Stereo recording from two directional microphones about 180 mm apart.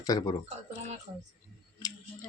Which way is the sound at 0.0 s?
20° left (ahead or behind).